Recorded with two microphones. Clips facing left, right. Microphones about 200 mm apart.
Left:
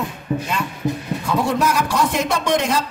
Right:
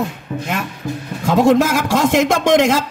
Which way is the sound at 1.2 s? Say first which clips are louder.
Right 7 dB; 90° right.